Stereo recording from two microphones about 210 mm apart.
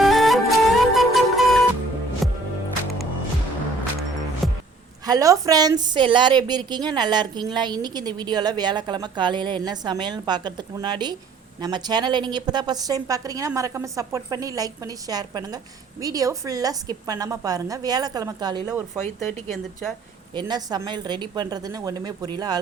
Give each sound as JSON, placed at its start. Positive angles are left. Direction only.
{"t": 0.0, "sound": "music", "side_deg": 0}
{"t": 5.0, "sound": "a woman's voice", "side_deg": -15}
{"t": 20.3, "sound": "a woman's voice", "side_deg": -20}